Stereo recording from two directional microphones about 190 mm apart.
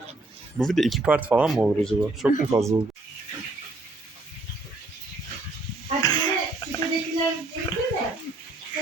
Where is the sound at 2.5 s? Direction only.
15° right (ahead or behind).